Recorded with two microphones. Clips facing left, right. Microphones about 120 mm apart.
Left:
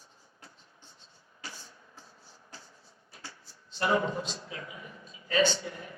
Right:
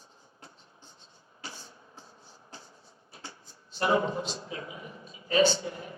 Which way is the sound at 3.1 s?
25° right (ahead or behind).